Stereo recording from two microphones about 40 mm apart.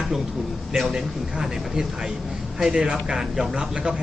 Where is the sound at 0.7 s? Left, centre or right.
Centre.